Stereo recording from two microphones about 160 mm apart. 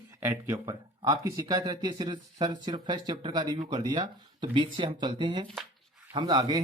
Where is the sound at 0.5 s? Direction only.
25° right (ahead or behind).